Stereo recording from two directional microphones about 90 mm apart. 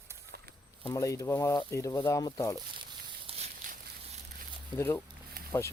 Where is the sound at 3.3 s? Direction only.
90° right.